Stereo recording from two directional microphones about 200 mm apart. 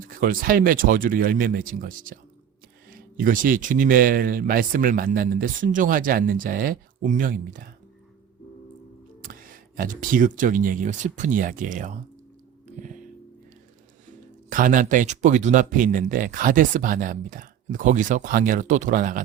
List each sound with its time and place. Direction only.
0.0 s speech: 45° right (ahead or behind)
9.2 s speech: 45° right (ahead or behind)
12.6 s music: 40° right (ahead or behind)
14.5 s speech: 40° right (ahead or behind)